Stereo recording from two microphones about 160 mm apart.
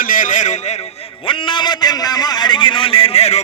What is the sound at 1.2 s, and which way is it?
A man's voice, 30° left (ahead or behind).